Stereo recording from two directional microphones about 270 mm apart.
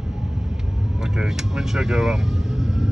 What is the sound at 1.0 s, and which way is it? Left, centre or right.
Speech, centre.